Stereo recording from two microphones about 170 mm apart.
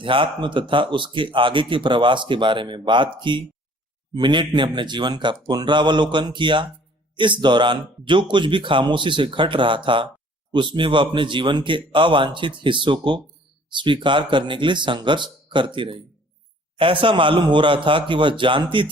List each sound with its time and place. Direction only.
0.0 s speech: 30° right (ahead or behind)